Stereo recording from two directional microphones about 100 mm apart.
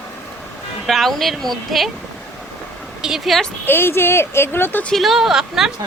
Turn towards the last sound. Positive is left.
turn(degrees=-5)  # may be behind; listen again after turning